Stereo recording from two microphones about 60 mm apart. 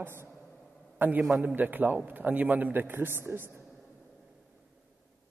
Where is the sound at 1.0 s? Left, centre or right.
Right.